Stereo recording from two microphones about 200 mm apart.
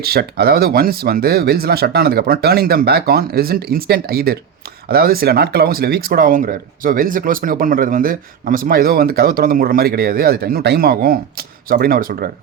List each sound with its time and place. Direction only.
0.0 s speech: 50° right (ahead or behind)